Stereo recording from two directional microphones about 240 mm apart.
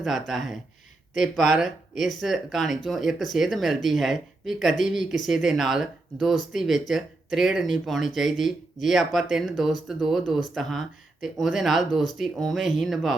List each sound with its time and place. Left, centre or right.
0.0 s speech: centre